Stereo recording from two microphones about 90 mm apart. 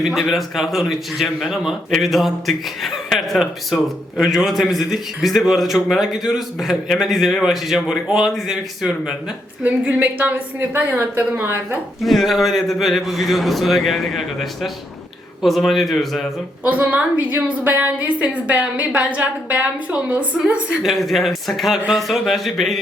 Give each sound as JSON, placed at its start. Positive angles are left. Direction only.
{"t": 0.0, "sound": "a man's voice", "side_deg": -5}
{"t": 9.6, "sound": "a woman's voice", "side_deg": -20}
{"t": 12.0, "sound": "a man's voice", "side_deg": 0}
{"t": 16.6, "sound": "a woman's voice", "side_deg": -15}
{"t": 20.8, "sound": "a man's voice", "side_deg": 0}